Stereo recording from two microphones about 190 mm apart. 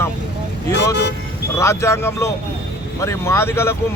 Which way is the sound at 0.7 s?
65° left (ahead or behind).